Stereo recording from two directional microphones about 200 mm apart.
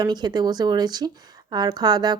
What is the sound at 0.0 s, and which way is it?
Speech, 20° right (ahead or behind).